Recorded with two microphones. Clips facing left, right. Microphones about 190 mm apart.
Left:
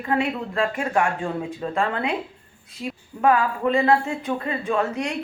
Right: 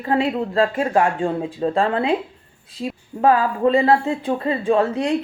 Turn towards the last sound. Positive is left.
turn(degrees=-30)  # may be behind; listen again after turning